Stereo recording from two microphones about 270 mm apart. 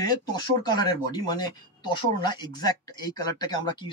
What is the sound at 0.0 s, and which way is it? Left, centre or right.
Speech, centre.